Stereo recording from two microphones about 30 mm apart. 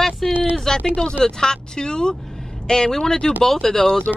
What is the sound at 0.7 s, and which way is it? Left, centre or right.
Speech, left.